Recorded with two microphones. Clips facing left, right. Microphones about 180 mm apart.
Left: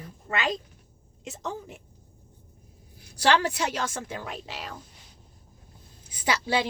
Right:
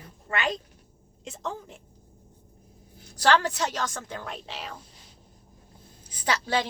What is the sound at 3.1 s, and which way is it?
Speech, 10° left (ahead or behind).